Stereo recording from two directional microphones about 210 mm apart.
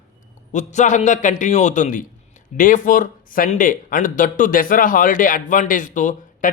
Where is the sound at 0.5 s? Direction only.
35° left (ahead or behind).